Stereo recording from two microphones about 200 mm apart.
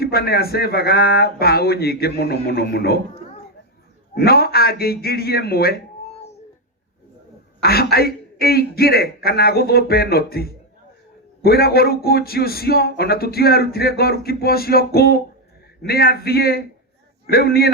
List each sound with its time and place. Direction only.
0.0 s speech: 50° left (ahead or behind)
4.1 s speech: 50° left (ahead or behind)
7.6 s speech: 50° left (ahead or behind)